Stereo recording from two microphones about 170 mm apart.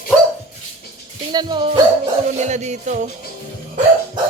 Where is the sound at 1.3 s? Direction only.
25° right (ahead or behind).